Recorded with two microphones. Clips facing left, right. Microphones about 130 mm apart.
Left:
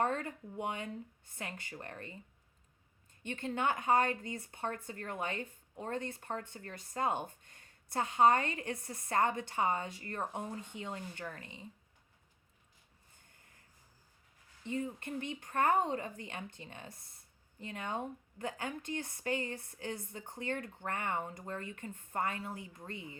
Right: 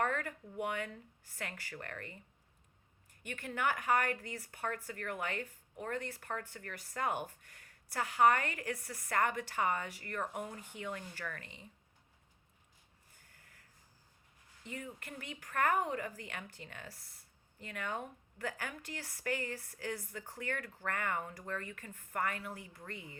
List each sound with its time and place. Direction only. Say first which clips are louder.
0.0 s speech: left 2 dB; 25° left (ahead or behind)
3.2 s speech: left 2 dB; 25° left (ahead or behind)
13.1 s snort: right 1 dB; 25° left (ahead or behind)
14.6 s speech: left 8 dB; 25° left (ahead or behind)